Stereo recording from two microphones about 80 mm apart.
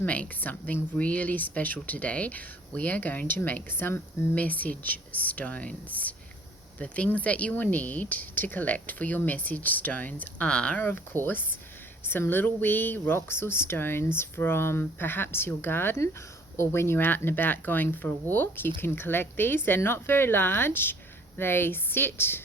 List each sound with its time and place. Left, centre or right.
0.0 s speech: centre
10.8 s speech: left